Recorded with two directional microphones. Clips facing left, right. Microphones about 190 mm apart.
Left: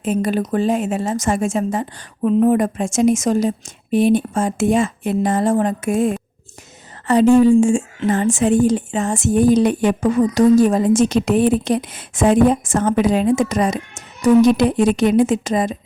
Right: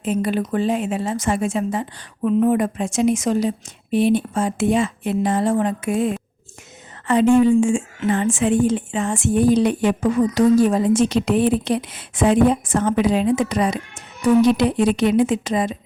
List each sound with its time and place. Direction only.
0.0 s a woman's voice: 45° left (ahead or behind)